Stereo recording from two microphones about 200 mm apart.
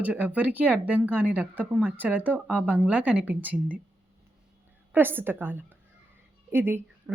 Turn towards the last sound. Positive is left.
turn(degrees=-10)  # may be behind; listen again after turning